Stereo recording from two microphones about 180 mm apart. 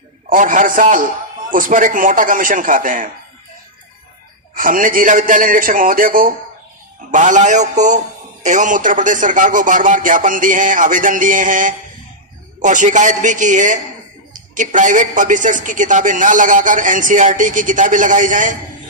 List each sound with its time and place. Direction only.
0.3 s a woman's voice: 45° right (ahead or behind)
4.5 s a woman's voice: 50° right (ahead or behind)